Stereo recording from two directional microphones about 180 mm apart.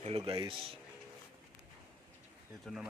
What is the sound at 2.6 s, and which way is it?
Speech, centre (ahead or behind).